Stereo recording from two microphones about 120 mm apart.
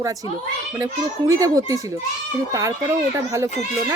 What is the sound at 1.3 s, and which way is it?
Speech, 30° right (ahead or behind).